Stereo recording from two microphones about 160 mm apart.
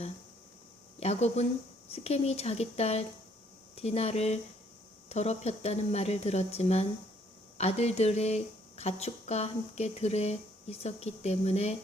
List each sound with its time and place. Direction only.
0.9 s speech: 40° left (ahead or behind)